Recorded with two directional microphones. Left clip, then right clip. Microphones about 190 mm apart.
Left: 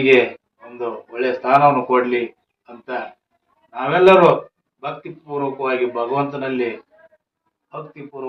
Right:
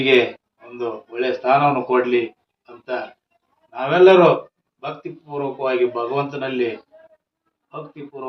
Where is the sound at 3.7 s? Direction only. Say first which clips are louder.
Even; 30° right (ahead or behind).